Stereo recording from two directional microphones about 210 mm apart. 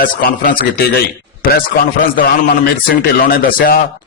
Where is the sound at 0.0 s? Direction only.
40° left (ahead or behind).